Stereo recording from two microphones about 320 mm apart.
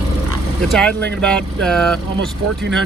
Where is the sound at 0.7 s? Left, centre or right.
Centre.